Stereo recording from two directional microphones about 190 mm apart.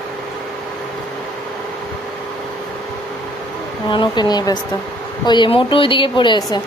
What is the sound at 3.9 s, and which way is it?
A woman's voice, 25° left (ahead or behind).